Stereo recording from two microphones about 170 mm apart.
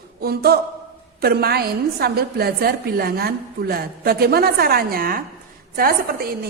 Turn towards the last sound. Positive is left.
turn(degrees=-60)  # may be behind; listen again after turning